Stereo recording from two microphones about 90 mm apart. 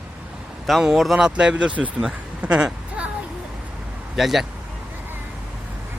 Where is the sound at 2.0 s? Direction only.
10° right (ahead or behind).